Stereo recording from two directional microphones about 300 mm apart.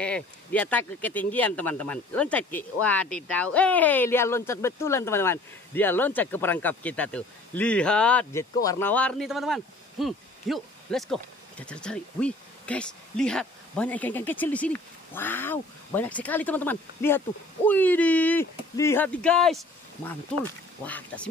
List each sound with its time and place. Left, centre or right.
0.0 s speech: centre